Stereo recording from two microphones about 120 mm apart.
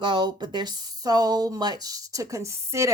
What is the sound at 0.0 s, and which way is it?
Speech, 40° right (ahead or behind).